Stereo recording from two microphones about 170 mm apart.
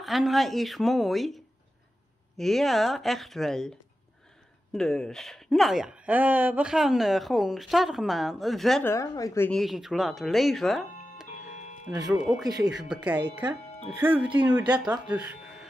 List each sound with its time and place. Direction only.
0.0 s speech: centre (ahead or behind)
4.7 s speech: 5° left (ahead or behind)
8.8 s speech: 20° left (ahead or behind)
9.5 s speech: centre (ahead or behind)
11.5 s music: 45° left (ahead or behind)
12.1 s speech: 5° right (ahead or behind)